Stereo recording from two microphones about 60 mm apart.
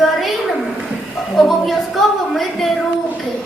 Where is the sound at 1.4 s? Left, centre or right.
Centre.